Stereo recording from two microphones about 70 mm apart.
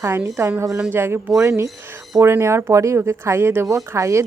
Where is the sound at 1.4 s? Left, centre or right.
Right.